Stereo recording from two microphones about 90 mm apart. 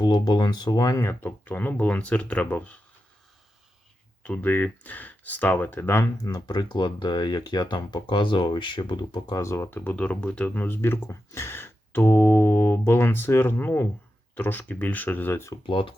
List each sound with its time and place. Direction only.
0.0 s speech: 55° left (ahead or behind); by 2.7 s 15° left (ahead or behind)
4.2 s speech: 20° left (ahead or behind)
6.2 s speech: 50° left (ahead or behind)
9.3 s speech: 35° left (ahead or behind)
15.6 s speech: 70° left (ahead or behind)